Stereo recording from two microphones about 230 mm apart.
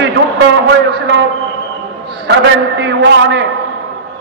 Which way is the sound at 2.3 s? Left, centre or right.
Right.